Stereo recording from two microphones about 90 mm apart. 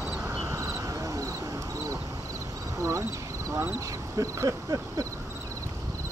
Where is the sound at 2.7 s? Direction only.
35° right (ahead or behind).